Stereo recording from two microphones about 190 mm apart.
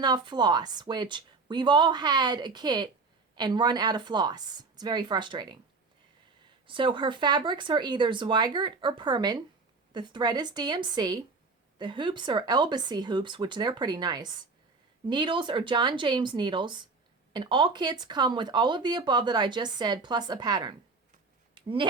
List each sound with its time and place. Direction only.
0.0 s speech: 20° right (ahead or behind)
6.7 s speech: 25° right (ahead or behind)
21.5 s a sound: 25° right (ahead or behind)